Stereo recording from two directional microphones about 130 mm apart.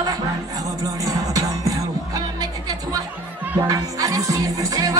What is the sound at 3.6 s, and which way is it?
Music, 25° right (ahead or behind).